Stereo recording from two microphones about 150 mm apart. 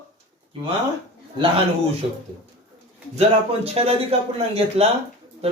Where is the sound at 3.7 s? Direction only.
40° right (ahead or behind).